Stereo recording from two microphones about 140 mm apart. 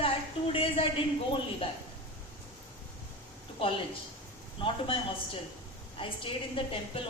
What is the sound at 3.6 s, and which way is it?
Speech, 40° left (ahead or behind).